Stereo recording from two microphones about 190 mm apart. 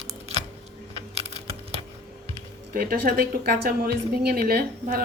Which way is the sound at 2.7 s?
50° right (ahead or behind).